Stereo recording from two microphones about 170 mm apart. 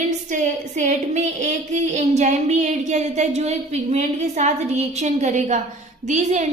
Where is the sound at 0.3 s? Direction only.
45° right (ahead or behind).